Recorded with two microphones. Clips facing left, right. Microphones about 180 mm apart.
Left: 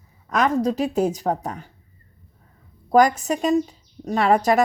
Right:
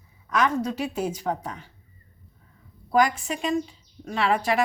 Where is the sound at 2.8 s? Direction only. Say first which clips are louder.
Left 5 dB; 45° left (ahead or behind).